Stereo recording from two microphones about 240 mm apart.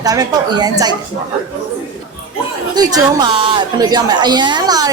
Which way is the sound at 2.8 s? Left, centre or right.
Centre.